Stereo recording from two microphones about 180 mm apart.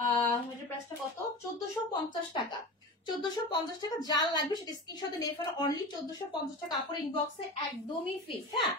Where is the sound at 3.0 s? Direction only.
25° left (ahead or behind).